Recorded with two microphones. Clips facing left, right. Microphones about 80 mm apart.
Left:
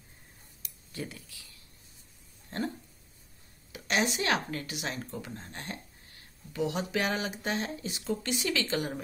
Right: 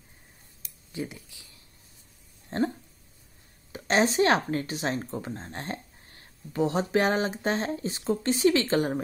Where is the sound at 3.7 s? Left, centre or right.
Right.